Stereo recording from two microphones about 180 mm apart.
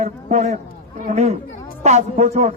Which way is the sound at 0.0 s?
45° right (ahead or behind).